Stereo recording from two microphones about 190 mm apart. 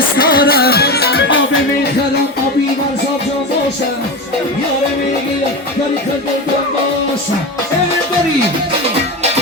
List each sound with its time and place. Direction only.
0.2 s music: 50° left (ahead or behind); by 1.9 s 75° left (ahead or behind)